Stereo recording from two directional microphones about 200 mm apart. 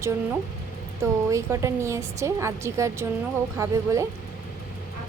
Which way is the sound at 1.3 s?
15° right (ahead or behind).